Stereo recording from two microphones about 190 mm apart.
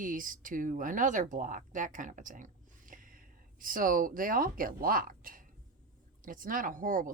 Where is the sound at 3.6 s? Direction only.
45° right (ahead or behind).